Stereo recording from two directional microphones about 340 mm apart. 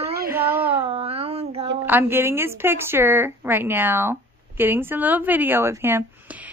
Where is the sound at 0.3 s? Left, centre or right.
Centre.